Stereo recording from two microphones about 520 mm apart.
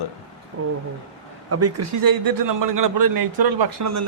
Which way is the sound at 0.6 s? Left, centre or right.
Right.